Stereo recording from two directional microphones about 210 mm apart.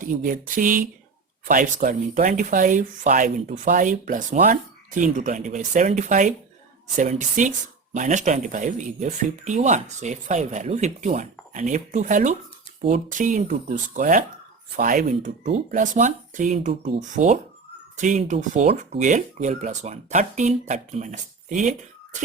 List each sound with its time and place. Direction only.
0.0 s speech: 40° right (ahead or behind)
17.9 s speech: 35° right (ahead or behind)